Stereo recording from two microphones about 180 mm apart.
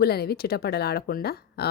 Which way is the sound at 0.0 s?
60° left (ahead or behind).